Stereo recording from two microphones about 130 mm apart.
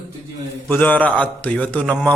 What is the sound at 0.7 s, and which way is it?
Speech, 15° left (ahead or behind).